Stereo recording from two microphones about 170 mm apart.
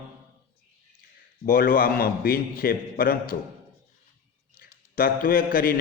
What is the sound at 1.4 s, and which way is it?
A man's voice, 60° left (ahead or behind).